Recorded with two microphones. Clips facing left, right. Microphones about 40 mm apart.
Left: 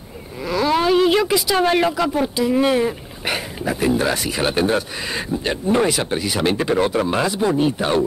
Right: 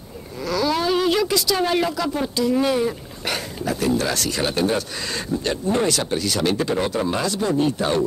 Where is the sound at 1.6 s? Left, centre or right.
Left.